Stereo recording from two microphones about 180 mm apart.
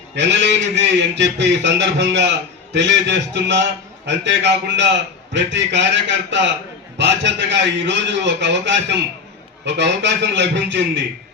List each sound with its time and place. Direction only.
0.2 s a man's voice: 75° right (ahead or behind)